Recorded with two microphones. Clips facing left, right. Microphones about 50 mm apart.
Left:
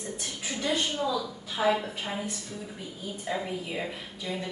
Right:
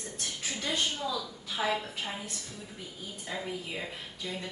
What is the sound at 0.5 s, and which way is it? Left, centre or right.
A woman's voice, centre.